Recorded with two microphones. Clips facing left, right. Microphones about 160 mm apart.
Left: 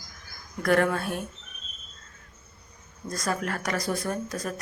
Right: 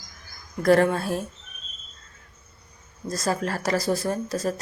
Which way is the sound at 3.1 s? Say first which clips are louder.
Right 3 dB; 30° right (ahead or behind).